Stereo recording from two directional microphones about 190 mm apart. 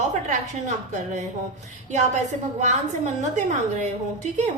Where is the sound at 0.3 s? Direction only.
40° right (ahead or behind).